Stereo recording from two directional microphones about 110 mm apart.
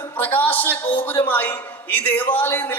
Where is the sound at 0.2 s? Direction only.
15° left (ahead or behind).